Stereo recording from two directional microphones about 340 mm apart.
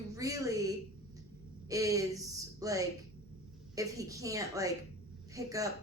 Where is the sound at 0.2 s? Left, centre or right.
Centre.